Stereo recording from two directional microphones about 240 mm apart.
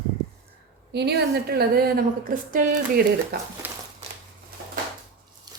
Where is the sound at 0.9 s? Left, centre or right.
Right.